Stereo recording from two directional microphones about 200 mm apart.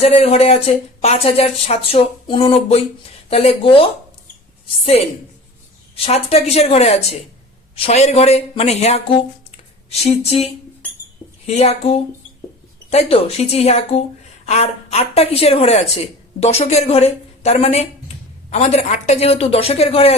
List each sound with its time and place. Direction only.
0.0 s a woman's voice: 30° left (ahead or behind)
6.1 s a woman's voice: 30° left (ahead or behind)